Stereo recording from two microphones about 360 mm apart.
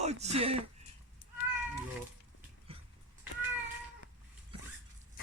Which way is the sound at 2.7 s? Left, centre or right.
Centre.